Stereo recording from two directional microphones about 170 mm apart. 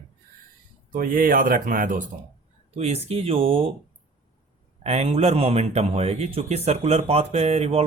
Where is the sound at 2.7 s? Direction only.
40° right (ahead or behind).